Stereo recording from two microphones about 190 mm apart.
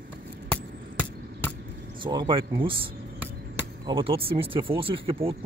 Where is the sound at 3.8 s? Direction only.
30° right (ahead or behind).